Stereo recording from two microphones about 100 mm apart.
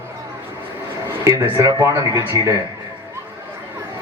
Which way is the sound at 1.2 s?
30° right (ahead or behind).